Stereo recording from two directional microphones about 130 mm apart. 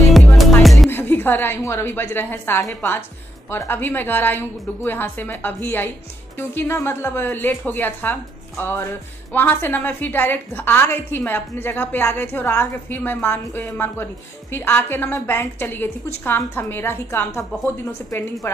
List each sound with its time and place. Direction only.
0.4 s music: centre (ahead or behind)
0.8 s a woman's voice: 15° left (ahead or behind)